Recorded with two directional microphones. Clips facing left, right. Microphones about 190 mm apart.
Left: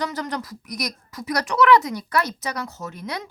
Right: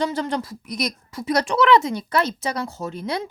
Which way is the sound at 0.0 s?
25° right (ahead or behind).